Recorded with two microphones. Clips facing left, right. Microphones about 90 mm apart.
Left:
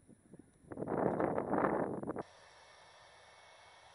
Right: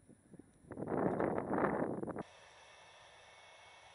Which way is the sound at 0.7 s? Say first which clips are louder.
Left 2 dB; 35° left (ahead or behind).